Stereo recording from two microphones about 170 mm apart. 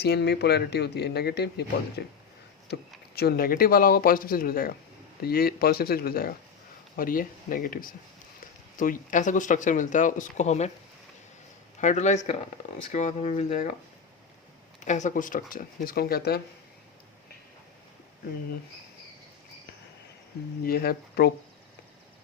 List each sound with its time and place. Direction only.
0.0 s speech: 75° left (ahead or behind)
3.2 s speech: 65° left (ahead or behind); by 10.7 s 40° left (ahead or behind)
11.8 s speech: 45° left (ahead or behind)
14.8 s speech: 45° left (ahead or behind); by 16.4 s 65° left (ahead or behind)
20.7 s speech: 65° left (ahead or behind)